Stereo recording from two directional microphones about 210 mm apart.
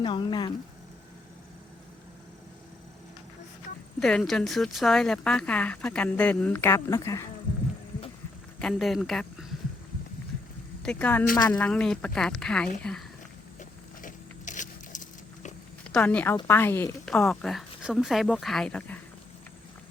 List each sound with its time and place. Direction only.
0.0 s speech: 20° left (ahead or behind)
4.0 s speech: 5° left (ahead or behind)
8.5 s speech: centre (ahead or behind)
10.8 s a woman's voice: 5° left (ahead or behind)
13.6 s a sound: 35° left (ahead or behind)
15.9 s a woman's voice: 5° left (ahead or behind)